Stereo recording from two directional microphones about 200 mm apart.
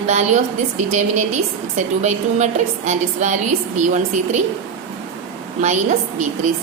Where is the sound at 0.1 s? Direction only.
35° right (ahead or behind).